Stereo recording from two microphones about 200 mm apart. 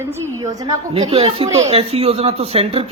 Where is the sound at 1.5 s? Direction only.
15° right (ahead or behind).